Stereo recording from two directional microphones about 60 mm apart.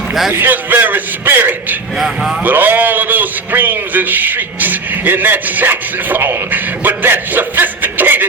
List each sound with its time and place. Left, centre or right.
0.1 s a man's voice: centre
0.3 s a man's voice: right